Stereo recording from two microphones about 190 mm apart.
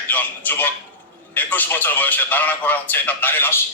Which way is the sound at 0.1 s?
10° left (ahead or behind).